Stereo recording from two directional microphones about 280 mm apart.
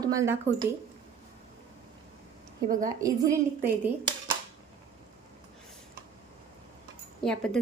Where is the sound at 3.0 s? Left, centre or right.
Centre.